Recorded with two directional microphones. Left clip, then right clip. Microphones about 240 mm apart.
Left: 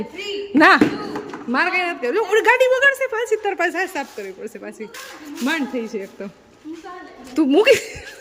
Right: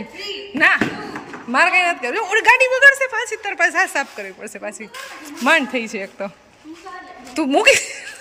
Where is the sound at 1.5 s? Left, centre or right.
Centre.